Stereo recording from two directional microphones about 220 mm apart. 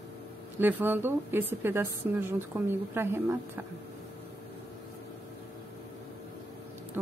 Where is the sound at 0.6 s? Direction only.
10° right (ahead or behind).